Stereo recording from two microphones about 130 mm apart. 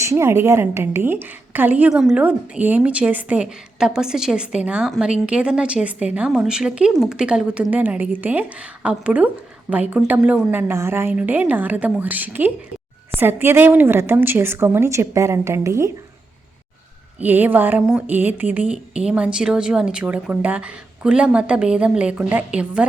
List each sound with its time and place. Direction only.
0.0 s a woman's voice: 20° right (ahead or behind)
17.2 s speech: 15° right (ahead or behind)